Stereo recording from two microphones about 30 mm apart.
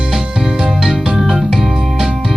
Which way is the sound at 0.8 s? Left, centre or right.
Centre.